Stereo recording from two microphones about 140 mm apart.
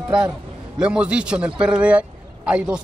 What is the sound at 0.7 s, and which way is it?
A man's voice, 5° right (ahead or behind).